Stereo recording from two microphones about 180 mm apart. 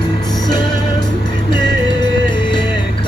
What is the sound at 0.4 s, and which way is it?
Music, 25° left (ahead or behind).